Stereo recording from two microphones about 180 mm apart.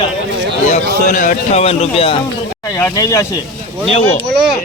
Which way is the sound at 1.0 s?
45° left (ahead or behind).